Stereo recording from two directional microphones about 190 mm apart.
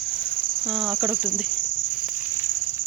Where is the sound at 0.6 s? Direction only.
5° right (ahead or behind).